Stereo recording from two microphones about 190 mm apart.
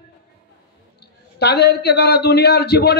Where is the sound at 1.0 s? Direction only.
60° left (ahead or behind).